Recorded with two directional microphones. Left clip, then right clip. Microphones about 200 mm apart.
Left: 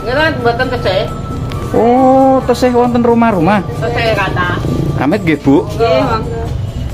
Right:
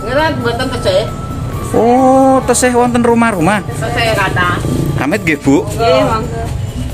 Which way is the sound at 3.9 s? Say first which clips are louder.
Right 1 dB; 35° right (ahead or behind).